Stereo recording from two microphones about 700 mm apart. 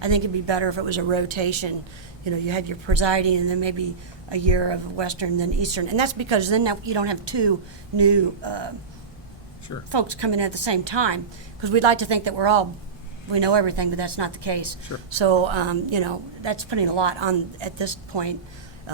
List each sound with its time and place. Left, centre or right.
0.0 s a woman's voice: right
9.9 s a woman's voice: right